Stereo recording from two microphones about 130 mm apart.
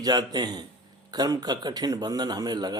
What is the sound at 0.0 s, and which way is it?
Speech, 30° right (ahead or behind).